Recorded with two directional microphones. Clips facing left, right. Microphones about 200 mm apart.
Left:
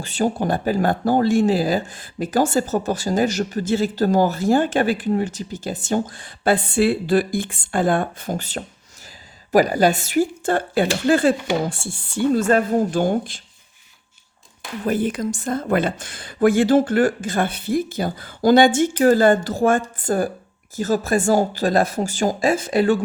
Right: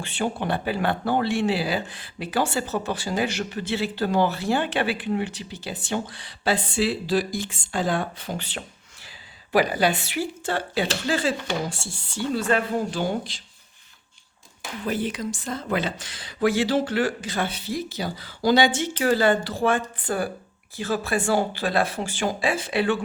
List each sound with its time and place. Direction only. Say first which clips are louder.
0.0 s speech: left 6 dB; 40° left (ahead or behind)
14.8 s speech: left 6 dB; 50° left (ahead or behind)